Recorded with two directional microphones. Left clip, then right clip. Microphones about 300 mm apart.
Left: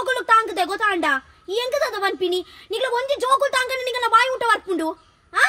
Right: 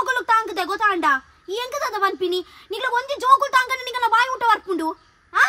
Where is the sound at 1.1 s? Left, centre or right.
Right.